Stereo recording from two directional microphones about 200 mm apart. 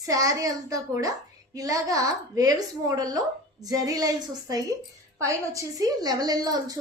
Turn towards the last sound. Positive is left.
turn(degrees=-20)  # may be behind; listen again after turning